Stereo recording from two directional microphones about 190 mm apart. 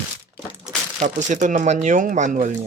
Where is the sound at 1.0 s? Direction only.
40° right (ahead or behind).